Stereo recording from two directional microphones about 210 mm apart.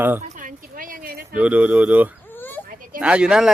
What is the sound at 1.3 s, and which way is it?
Speech, 5° right (ahead or behind).